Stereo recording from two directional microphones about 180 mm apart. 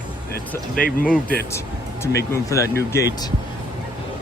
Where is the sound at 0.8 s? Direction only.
55° left (ahead or behind).